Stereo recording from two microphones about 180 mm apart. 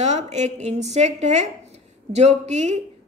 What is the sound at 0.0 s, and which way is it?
A woman's voice, 40° right (ahead or behind).